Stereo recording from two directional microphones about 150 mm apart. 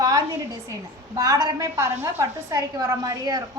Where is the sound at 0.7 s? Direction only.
20° right (ahead or behind).